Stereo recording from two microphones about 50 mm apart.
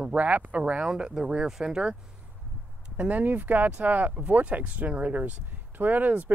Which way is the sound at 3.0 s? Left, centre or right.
Right.